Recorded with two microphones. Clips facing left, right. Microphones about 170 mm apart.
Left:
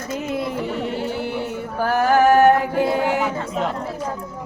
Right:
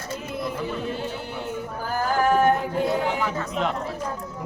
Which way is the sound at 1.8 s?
75° left (ahead or behind).